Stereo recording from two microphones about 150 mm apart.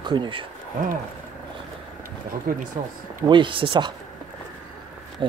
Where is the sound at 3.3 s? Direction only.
35° right (ahead or behind).